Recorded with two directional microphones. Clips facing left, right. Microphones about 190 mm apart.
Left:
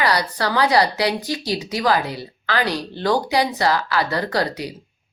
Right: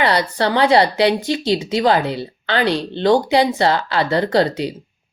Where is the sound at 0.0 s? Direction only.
25° right (ahead or behind).